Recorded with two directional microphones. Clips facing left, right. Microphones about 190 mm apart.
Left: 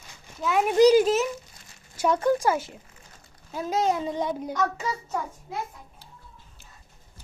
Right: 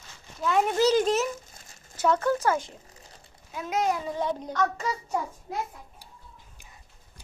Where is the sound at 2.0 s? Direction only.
15° left (ahead or behind).